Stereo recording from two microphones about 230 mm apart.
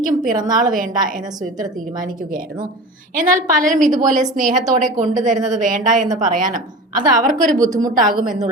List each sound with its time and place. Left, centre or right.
0.0 s a woman's voice: right
3.2 s a woman's voice: right